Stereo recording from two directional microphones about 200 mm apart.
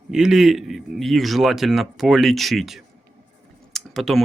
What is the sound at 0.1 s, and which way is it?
Speech, 5° right (ahead or behind).